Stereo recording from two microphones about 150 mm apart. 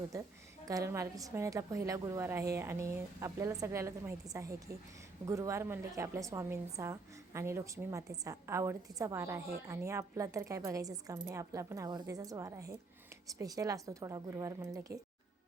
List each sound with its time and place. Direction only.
0.7 s a woman's voice: 20° right (ahead or behind)